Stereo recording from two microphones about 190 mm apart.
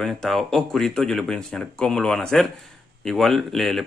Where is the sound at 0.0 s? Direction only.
Centre (ahead or behind).